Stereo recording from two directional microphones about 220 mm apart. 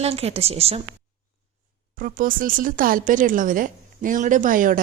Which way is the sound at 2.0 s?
40° right (ahead or behind).